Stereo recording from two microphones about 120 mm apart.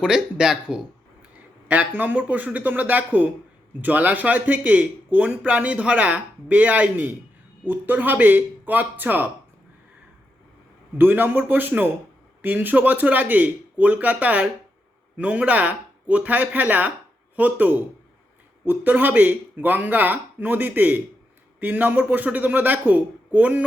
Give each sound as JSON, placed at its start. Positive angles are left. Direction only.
{"t": 0.0, "sound": "a man's voice", "side_deg": -5}
{"t": 10.9, "sound": "a man's voice", "side_deg": -15}